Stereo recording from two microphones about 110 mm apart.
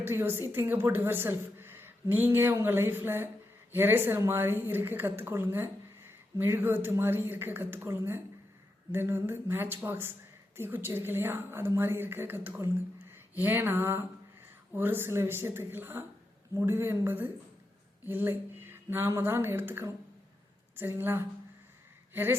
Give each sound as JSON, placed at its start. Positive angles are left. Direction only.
{"t": 0.0, "sound": "a woman's voice", "side_deg": -20}